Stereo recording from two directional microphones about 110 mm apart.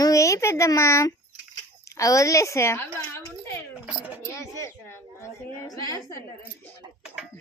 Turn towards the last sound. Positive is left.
turn(degrees=35)  # may be behind; listen again after turning